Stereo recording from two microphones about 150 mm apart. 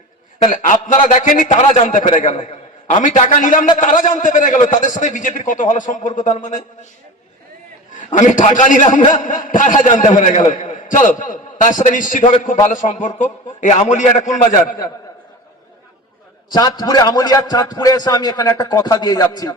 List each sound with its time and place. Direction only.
0.5 s a man's voice: 55° left (ahead or behind)
7.9 s a man's voice: 55° left (ahead or behind)
16.5 s a man's voice: 25° left (ahead or behind)